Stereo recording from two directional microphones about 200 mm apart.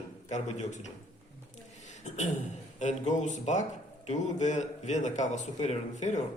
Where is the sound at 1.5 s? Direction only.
35° left (ahead or behind).